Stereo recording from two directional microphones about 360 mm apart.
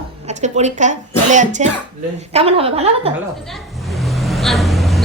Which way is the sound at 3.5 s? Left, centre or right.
Centre.